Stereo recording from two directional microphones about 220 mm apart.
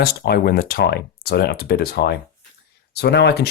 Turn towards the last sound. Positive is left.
turn(degrees=50)  # may be behind; listen again after turning